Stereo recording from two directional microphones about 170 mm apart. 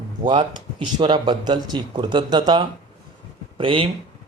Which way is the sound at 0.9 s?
25° right (ahead or behind).